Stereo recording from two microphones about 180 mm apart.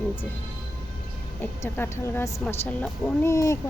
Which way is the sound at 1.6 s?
10° left (ahead or behind).